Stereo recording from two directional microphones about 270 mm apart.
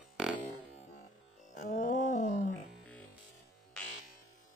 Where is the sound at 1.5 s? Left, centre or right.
Left.